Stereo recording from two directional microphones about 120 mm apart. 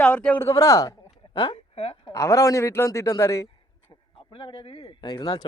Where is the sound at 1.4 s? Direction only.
50° left (ahead or behind).